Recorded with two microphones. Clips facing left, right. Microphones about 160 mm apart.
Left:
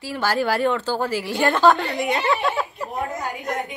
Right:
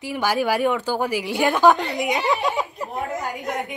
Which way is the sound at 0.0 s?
15° right (ahead or behind).